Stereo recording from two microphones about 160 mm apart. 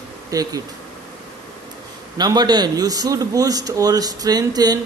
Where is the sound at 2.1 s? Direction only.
25° right (ahead or behind).